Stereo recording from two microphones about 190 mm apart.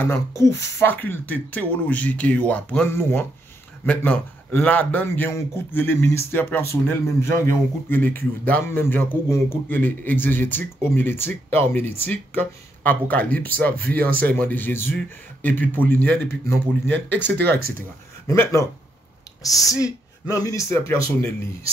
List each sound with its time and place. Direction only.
0.0 s a man's voice: 15° left (ahead or behind)